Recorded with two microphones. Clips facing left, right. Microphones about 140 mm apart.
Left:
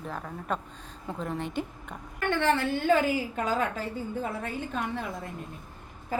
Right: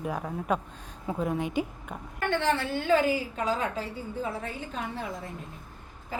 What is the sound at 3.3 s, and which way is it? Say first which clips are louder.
Speech: left 1 dB; 50° left (ahead or behind).